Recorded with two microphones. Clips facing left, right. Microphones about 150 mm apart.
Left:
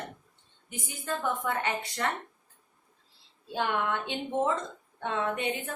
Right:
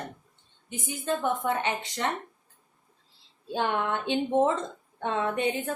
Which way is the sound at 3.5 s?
25° right (ahead or behind).